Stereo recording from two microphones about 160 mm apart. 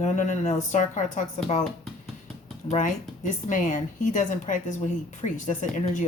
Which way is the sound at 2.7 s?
55° left (ahead or behind).